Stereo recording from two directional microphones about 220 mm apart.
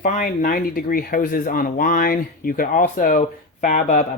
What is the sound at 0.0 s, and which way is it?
Speech, 35° left (ahead or behind).